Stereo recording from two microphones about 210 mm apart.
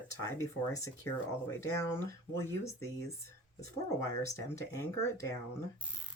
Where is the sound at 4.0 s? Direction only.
15° left (ahead or behind).